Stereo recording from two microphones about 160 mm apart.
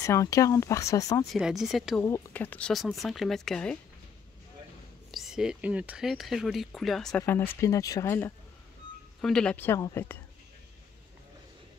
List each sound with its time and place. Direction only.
0.0 s speech: 20° left (ahead or behind)
1.2 s speech: centre (ahead or behind)
2.0 s speech: 15° left (ahead or behind)
5.1 s speech: centre (ahead or behind)
7.6 s speech: 20° left (ahead or behind)
9.2 s speech: 5° left (ahead or behind)